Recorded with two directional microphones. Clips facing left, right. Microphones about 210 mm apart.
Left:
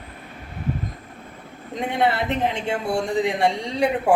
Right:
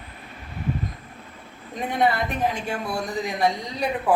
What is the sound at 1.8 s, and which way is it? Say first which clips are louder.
Speech: left 1 dB; 20° left (ahead or behind).